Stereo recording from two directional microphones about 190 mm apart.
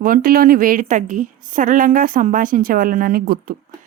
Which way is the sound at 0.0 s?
50° right (ahead or behind).